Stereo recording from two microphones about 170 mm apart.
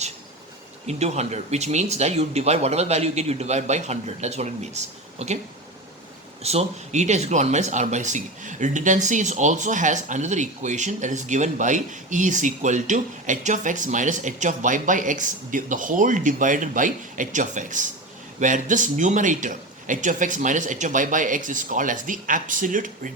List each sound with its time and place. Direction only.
0.9 s speech: 40° right (ahead or behind)
6.4 s speech: 40° right (ahead or behind)